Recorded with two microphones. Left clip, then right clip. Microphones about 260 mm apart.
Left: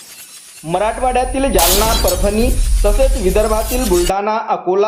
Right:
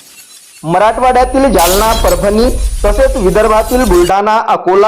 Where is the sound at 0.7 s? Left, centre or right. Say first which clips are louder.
Right 7 dB; right.